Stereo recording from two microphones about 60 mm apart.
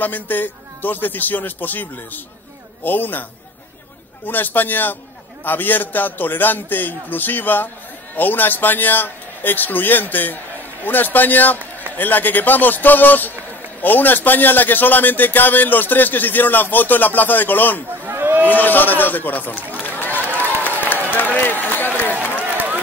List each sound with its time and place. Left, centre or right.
0.0 s a man's voice: left
4.3 s a man's voice: left
18.0 s a sound: right
18.5 s speech: left
20.6 s run: left